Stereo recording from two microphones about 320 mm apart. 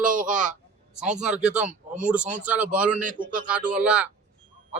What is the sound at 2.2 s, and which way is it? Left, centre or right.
Speech, right.